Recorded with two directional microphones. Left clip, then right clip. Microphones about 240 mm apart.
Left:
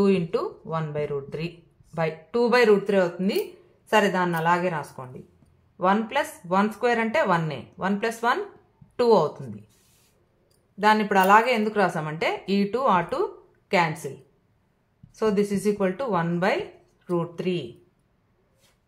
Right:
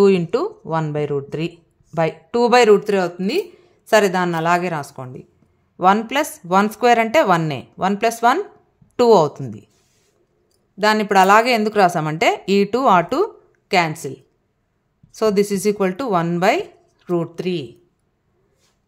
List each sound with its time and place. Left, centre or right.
0.0 s a woman's voice: right
10.8 s a woman's voice: right